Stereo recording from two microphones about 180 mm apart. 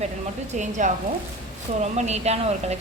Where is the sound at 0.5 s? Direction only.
40° right (ahead or behind).